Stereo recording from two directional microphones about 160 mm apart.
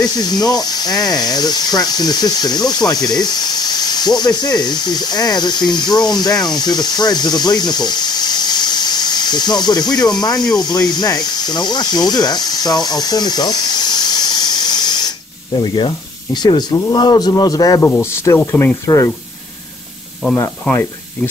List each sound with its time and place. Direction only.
0.0 s speech: 25° left (ahead or behind)